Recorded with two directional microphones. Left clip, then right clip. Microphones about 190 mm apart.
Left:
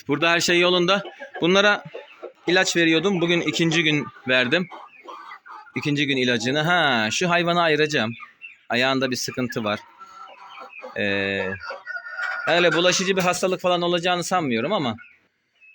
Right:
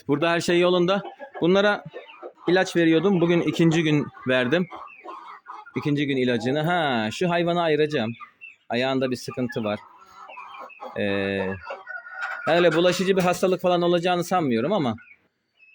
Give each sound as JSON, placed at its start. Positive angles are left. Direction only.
{"t": 0.1, "sound": "a man's voice", "side_deg": -20}
{"t": 5.7, "sound": "speech", "side_deg": -15}
{"t": 10.9, "sound": "a man's voice", "side_deg": -15}